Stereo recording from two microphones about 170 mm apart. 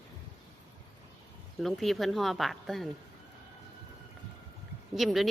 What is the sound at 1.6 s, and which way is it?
Speech, centre (ahead or behind).